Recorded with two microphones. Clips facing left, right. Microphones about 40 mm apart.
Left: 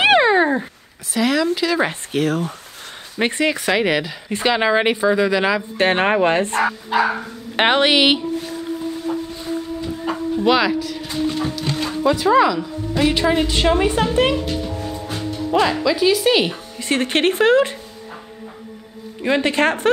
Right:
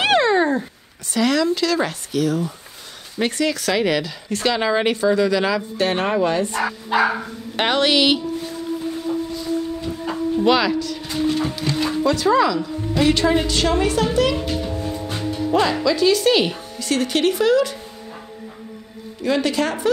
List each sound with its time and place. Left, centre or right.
0.0 s cat: centre
1.1 s speech: centre
2.1 s speech: left
3.2 s speech: left
5.8 s speech: left
6.9 s dog: centre
7.5 s speech: left
10.4 s speech: centre
11.1 s speech: left
11.7 s speech: centre
15.8 s speech: centre
16.8 s speech: left
19.2 s speech: left